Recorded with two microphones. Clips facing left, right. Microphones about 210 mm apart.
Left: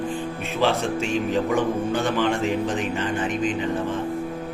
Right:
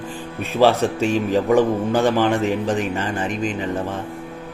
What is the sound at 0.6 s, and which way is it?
A man's voice, 40° right (ahead or behind).